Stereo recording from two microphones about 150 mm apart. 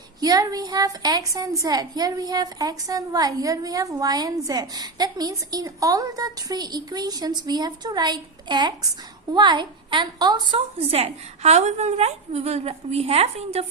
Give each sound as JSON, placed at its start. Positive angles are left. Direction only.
{"t": 0.2, "sound": "a woman's voice", "side_deg": -25}